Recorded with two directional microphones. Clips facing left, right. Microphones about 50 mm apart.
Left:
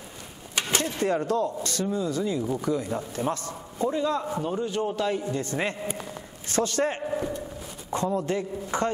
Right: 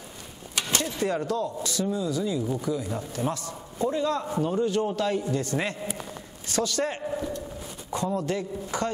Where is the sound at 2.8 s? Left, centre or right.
Left.